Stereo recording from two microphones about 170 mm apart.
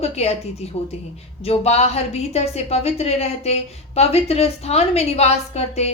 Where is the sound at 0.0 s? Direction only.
40° left (ahead or behind).